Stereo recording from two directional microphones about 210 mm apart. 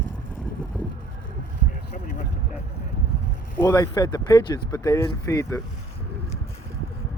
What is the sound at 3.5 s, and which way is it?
Speech, 15° left (ahead or behind).